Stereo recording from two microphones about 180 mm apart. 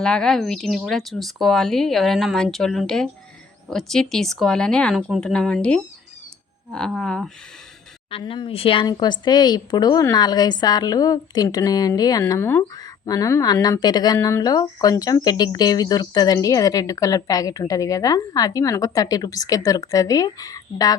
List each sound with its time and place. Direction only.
0.0 s speech: 5° left (ahead or behind)
8.1 s speech: 30° left (ahead or behind)